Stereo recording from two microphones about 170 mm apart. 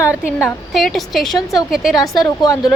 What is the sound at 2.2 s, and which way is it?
Speech, 20° left (ahead or behind).